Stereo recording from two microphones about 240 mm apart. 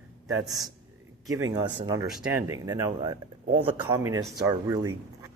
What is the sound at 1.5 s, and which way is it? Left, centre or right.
Speech, centre.